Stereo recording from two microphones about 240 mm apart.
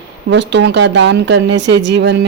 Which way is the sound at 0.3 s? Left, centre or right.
Right.